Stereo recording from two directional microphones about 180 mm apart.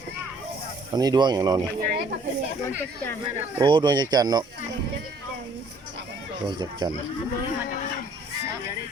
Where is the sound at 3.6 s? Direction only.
25° right (ahead or behind).